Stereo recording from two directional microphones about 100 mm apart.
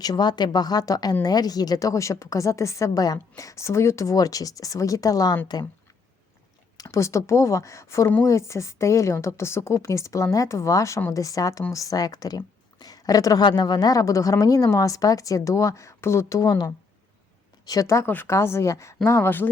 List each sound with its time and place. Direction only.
0.0 s a woman's voice: 45° left (ahead or behind)
6.7 s a woman's voice: 35° left (ahead or behind)